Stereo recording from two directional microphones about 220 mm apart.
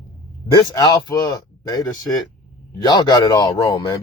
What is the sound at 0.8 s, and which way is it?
Speech, 15° left (ahead or behind).